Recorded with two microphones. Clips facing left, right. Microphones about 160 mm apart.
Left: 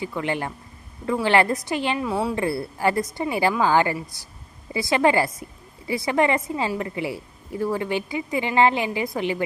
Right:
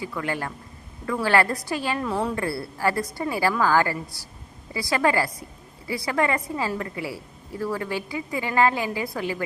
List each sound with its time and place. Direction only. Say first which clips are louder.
0.0 s a woman's voice: left 3 dB; 20° left (ahead or behind)
2.0 s a woman's voice: left 1 dB; 10° left (ahead or behind)
2.3 s a woman's voice: left 3 dB; 20° left (ahead or behind)